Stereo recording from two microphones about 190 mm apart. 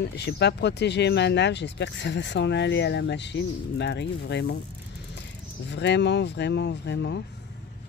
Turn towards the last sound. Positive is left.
turn(degrees=65)  # may be behind; listen again after turning